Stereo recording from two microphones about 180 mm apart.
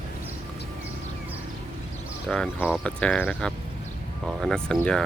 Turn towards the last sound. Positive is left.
turn(degrees=5)  # may be behind; listen again after turning